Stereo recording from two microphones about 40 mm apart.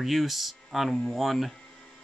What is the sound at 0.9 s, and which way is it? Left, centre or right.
Speech, centre.